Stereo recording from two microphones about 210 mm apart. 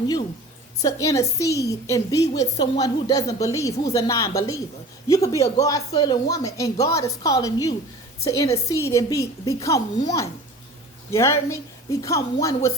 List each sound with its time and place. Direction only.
0.8 s speech: 15° left (ahead or behind)